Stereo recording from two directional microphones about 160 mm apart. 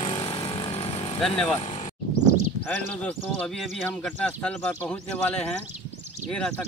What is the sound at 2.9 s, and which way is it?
Speech, 5° left (ahead or behind).